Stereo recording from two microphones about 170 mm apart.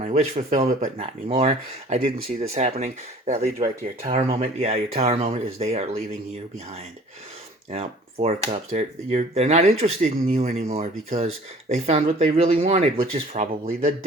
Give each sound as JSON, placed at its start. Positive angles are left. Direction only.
{"t": 0.0, "sound": "speech", "side_deg": -45}
{"t": 7.7, "sound": "speech", "side_deg": -40}